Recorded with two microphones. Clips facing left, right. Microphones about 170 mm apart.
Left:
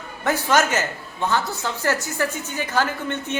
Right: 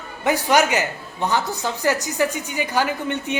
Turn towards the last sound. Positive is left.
turn(degrees=-15)  # may be behind; listen again after turning